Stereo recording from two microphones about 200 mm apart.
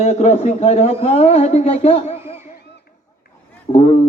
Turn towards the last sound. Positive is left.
turn(degrees=30)  # may be behind; listen again after turning